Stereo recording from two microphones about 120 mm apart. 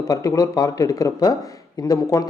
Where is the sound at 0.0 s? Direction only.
30° left (ahead or behind).